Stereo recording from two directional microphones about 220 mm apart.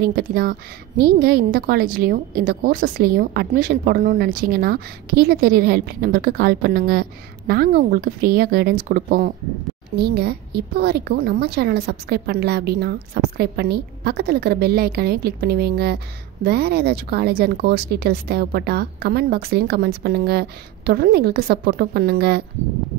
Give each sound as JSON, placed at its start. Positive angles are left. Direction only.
{"t": 0.0, "sound": "a woman's voice", "side_deg": -40}